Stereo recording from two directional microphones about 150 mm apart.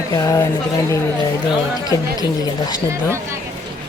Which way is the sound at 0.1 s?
20° left (ahead or behind).